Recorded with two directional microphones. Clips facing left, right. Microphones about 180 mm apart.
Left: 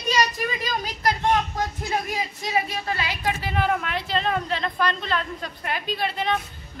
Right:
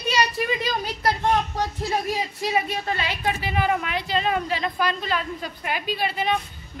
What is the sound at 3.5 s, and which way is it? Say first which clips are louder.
Speech: even; 5° right (ahead or behind).